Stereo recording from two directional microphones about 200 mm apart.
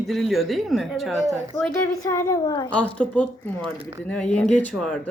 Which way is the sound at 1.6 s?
15° left (ahead or behind).